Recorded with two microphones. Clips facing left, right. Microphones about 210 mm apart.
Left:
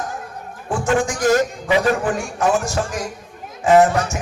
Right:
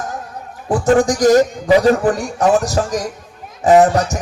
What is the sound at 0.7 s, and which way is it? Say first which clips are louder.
Speech: right 6 dB; 35° right (ahead or behind).